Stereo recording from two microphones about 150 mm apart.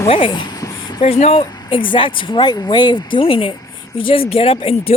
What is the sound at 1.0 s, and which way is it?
Speech, 45° left (ahead or behind).